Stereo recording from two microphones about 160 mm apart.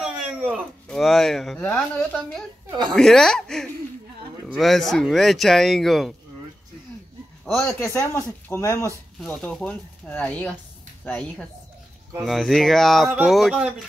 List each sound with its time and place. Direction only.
0.0 s a sound: 5° right (ahead or behind)
0.8 s speech: 5° left (ahead or behind)
7.6 s speech: 15° left (ahead or behind)
9.2 s speech: 5° left (ahead or behind)